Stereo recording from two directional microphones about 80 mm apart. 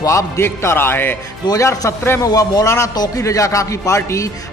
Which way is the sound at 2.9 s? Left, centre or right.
Left.